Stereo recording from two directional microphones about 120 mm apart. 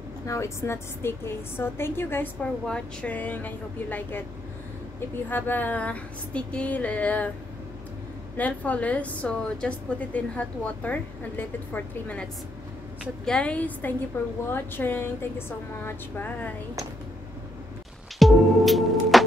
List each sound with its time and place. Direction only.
0.3 s a woman's voice: 25° left (ahead or behind)
5.3 s a woman's voice: 15° left (ahead or behind)
8.4 s a woman's voice: 10° left (ahead or behind)
18.2 s music: centre (ahead or behind)